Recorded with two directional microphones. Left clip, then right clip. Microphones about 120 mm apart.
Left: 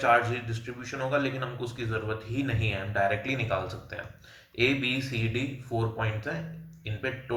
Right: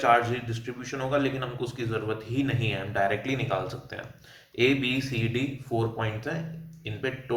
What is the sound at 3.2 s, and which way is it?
A man's voice, 5° right (ahead or behind).